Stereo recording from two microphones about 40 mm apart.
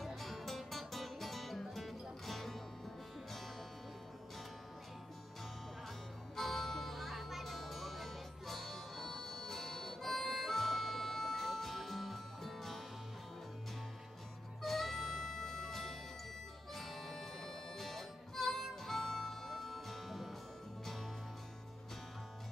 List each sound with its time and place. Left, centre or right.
0.0 s music: centre
6.3 s music: centre
14.6 s music: centre